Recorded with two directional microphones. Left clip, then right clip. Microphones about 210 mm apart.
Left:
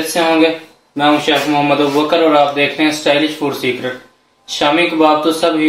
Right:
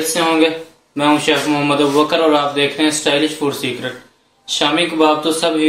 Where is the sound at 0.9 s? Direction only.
30° right (ahead or behind).